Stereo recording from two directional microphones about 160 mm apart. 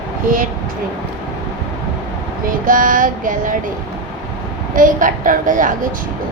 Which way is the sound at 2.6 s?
55° right (ahead or behind).